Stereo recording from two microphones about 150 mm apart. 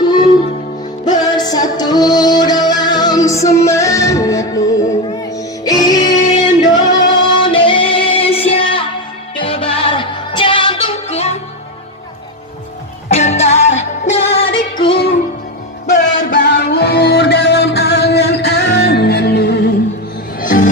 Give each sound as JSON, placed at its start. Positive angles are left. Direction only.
{"t": 1.0, "sound": "music", "side_deg": 30}
{"t": 13.1, "sound": "music", "side_deg": 45}
{"t": 15.9, "sound": "music", "side_deg": 75}
{"t": 20.3, "sound": "music", "side_deg": 65}